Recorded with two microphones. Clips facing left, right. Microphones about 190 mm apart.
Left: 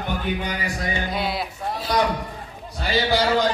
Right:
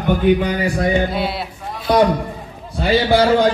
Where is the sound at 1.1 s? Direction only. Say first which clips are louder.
Right 4 dB; centre (ahead or behind).